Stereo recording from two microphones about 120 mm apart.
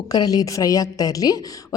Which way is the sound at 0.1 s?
35° left (ahead or behind).